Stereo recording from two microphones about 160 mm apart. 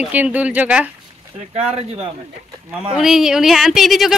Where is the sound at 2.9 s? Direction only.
5° right (ahead or behind).